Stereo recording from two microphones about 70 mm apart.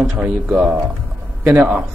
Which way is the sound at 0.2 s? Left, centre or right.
Centre.